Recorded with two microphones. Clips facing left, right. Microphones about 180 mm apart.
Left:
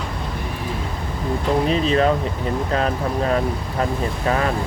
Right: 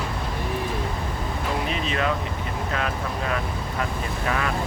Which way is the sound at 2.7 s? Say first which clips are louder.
Left 6 dB; 35° left (ahead or behind).